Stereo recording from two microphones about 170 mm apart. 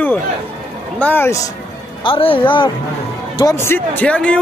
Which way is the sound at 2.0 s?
30° left (ahead or behind).